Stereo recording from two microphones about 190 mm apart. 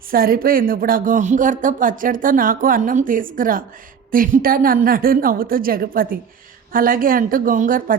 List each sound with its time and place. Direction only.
0.1 s speech: 50° right (ahead or behind)